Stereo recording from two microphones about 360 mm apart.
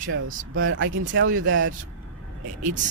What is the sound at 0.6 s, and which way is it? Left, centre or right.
Speech, right.